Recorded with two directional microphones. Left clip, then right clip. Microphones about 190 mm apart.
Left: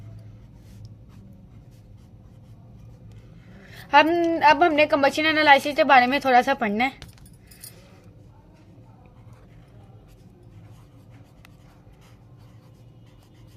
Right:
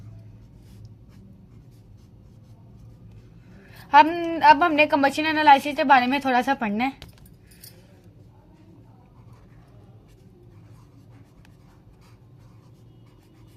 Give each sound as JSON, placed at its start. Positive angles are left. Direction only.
{"t": 3.6, "sound": "a woman's voice", "side_deg": 35}